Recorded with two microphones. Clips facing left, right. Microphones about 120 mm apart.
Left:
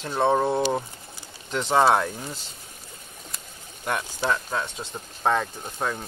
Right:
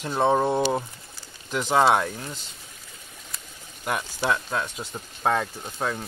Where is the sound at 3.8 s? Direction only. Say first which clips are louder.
Even; 5° right (ahead or behind).